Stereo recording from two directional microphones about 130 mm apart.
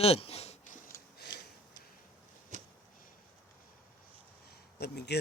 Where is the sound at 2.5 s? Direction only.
75° right (ahead or behind).